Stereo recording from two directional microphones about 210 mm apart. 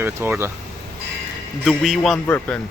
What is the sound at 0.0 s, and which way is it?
Speech, 10° right (ahead or behind).